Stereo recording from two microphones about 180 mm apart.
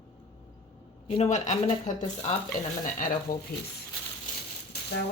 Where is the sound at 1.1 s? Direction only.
40° left (ahead or behind).